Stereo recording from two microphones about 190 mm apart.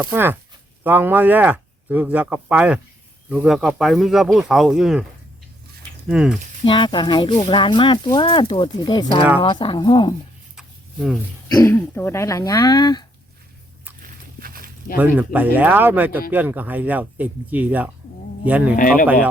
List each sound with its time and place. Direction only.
0.0 s speech: 10° right (ahead or behind)
6.1 s speech: 5° right (ahead or behind)
6.7 s speech: 25° left (ahead or behind)
10.6 s a sound: 5° right (ahead or behind)
11.5 s speech: 15° left (ahead or behind)
14.0 s walk: 50° right (ahead or behind)
14.9 s speech: 10° right (ahead or behind)